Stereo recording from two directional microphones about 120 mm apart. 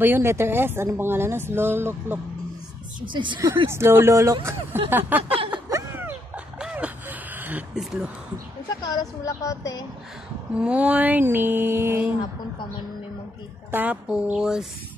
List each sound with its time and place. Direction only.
0.0 s a woman's voice: 20° right (ahead or behind)
3.1 s speech: 40° right (ahead or behind)
3.3 s a woman's voice: 20° right (ahead or behind)
5.7 s a sound: 20° right (ahead or behind)
8.8 s speech: 30° left (ahead or behind)
10.6 s mantra: 10° right (ahead or behind)
13.7 s mantra: 15° right (ahead or behind)